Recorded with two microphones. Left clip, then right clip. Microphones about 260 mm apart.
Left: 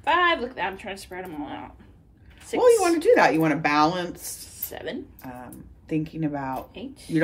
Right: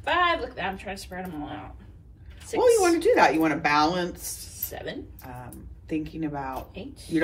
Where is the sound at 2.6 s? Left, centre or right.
Left.